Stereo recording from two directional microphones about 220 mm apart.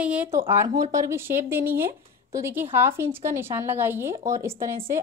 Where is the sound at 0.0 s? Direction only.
5° right (ahead or behind).